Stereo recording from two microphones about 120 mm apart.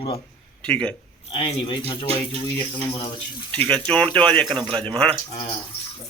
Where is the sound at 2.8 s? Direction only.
50° left (ahead or behind).